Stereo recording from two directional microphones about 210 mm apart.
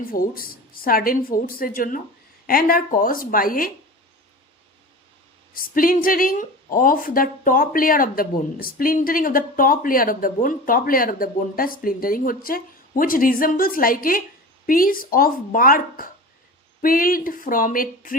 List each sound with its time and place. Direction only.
0.1 s a woman's voice: 45° left (ahead or behind)
5.5 s a woman's voice: 40° left (ahead or behind)